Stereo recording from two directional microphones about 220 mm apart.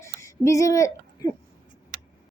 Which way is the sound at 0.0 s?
15° left (ahead or behind).